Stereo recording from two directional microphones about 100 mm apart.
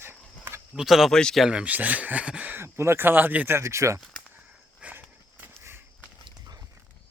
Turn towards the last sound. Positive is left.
turn(degrees=-25)  # may be behind; listen again after turning